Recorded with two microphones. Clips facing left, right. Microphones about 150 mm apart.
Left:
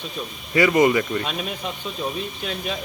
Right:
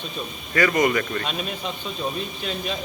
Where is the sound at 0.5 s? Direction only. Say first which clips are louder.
Left 3 dB; 20° left (ahead or behind); by 2.7 s centre (ahead or behind).